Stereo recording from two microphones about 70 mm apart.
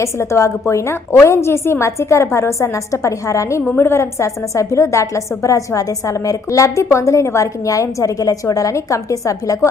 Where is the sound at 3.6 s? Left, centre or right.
Left.